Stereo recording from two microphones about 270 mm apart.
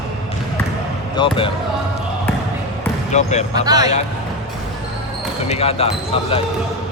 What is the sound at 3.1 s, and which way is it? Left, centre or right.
Speech, left.